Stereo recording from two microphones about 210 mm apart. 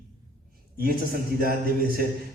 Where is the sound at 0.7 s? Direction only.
45° right (ahead or behind).